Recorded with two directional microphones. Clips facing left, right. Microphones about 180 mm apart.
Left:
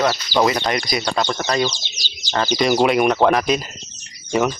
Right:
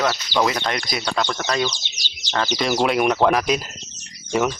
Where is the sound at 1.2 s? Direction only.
15° left (ahead or behind).